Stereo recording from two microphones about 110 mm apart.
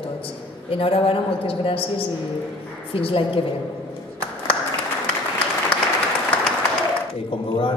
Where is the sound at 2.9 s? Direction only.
55° left (ahead or behind).